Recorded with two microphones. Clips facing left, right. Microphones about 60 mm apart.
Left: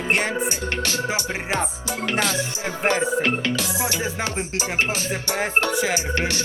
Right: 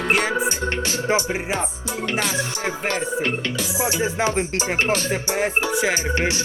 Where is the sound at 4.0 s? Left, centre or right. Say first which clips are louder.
Right 5 dB; right.